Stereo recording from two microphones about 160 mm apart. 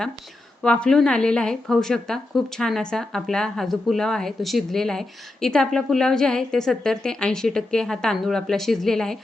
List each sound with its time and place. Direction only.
0.6 s a woman's voice: 5° left (ahead or behind)